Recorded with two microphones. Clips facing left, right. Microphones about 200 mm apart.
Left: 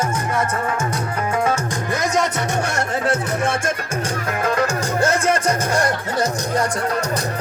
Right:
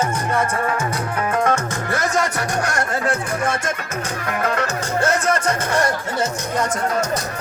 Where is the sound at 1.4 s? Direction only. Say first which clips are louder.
Right 1 dB; 15° left (ahead or behind).